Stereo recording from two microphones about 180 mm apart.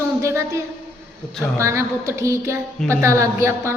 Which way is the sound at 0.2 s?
15° right (ahead or behind).